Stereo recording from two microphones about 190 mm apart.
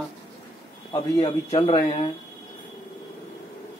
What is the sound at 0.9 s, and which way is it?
Speech, 20° left (ahead or behind).